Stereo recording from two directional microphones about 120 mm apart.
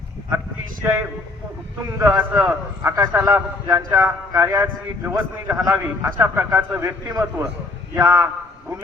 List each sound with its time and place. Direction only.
2.0 s a man's voice: 25° right (ahead or behind)
5.7 s a man's voice: 15° right (ahead or behind)
7.1 s a man's voice: 30° right (ahead or behind)